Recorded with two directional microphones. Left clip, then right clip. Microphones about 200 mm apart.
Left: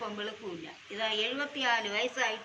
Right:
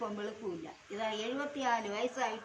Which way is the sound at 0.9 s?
20° right (ahead or behind).